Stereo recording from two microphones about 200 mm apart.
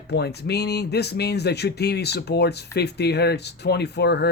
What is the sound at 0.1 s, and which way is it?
Speech, 55° left (ahead or behind).